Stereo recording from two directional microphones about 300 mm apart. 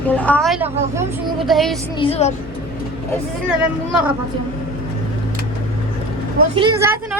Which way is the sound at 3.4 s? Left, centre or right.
Centre.